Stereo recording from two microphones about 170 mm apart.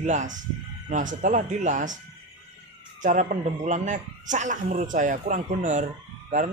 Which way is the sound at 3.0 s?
50° right (ahead or behind).